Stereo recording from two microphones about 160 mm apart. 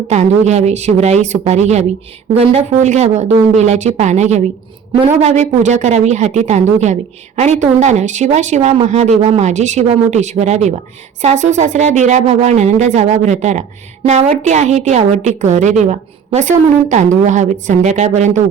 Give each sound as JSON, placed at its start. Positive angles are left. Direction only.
{"t": 0.1, "sound": "speech", "side_deg": -45}